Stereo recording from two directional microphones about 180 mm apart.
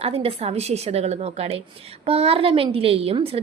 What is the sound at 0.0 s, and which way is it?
A woman's voice, 30° right (ahead or behind).